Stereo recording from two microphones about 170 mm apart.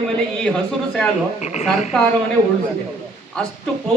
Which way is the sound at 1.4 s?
40° left (ahead or behind).